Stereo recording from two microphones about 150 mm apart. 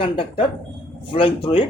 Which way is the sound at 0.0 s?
35° left (ahead or behind).